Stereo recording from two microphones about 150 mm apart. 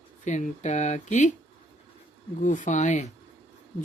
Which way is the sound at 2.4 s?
55° left (ahead or behind).